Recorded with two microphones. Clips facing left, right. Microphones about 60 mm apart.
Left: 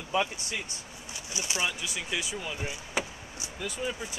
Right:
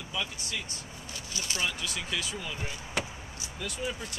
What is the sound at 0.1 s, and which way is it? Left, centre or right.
Speech, left.